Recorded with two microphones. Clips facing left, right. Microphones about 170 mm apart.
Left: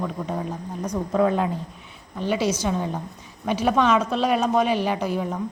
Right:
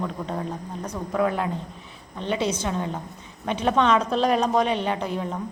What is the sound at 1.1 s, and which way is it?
Speech, 25° left (ahead or behind).